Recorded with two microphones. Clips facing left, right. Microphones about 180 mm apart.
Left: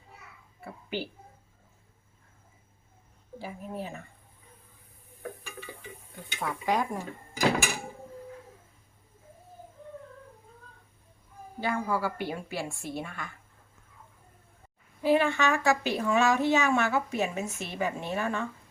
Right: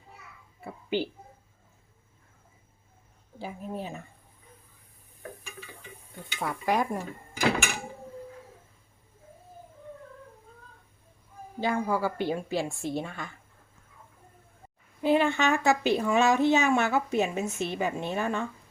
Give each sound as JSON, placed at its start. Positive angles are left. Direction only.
{"t": 0.6, "sound": "a sound", "side_deg": -20}
{"t": 3.4, "sound": "speech", "side_deg": -20}
{"t": 6.2, "sound": "speech", "side_deg": -10}
{"t": 11.6, "sound": "speech", "side_deg": -20}
{"t": 15.0, "sound": "speech", "side_deg": -20}